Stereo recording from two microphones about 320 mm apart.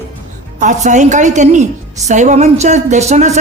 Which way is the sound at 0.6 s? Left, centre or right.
Right.